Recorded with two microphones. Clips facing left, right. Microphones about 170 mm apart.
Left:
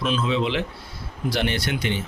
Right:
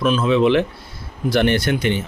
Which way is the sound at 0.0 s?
50° right (ahead or behind).